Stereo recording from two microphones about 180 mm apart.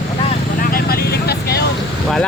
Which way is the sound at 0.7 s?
60° left (ahead or behind).